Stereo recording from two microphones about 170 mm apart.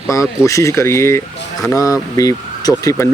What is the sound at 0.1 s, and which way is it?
Speech, 20° left (ahead or behind).